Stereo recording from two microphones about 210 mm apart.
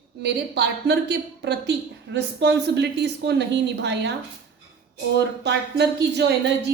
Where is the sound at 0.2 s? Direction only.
55° right (ahead or behind).